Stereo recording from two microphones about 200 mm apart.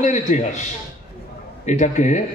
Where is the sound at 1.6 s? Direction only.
35° left (ahead or behind).